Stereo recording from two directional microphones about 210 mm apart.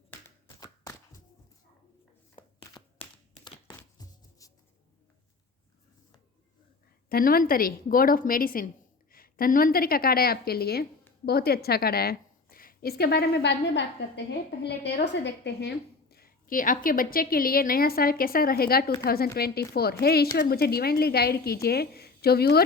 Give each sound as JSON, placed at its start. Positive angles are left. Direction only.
{"t": 0.4, "sound": "tap", "side_deg": 15}
{"t": 2.3, "sound": "a sound", "side_deg": 25}
{"t": 3.4, "sound": "chopping", "side_deg": 15}
{"t": 7.1, "sound": "a woman's voice", "side_deg": 45}